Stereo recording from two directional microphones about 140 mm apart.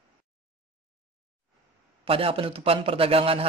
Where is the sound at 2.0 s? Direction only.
40° right (ahead or behind).